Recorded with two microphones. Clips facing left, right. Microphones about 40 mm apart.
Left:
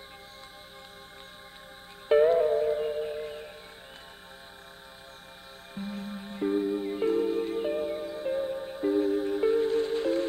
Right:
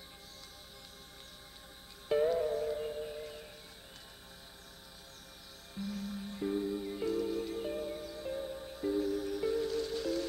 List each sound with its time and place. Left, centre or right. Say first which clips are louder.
2.0 s music: left 9 dB; left
5.8 s music: left 3 dB; left